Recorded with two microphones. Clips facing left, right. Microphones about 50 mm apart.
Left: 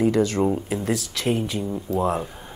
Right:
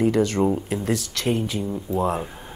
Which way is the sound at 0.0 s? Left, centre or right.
Centre.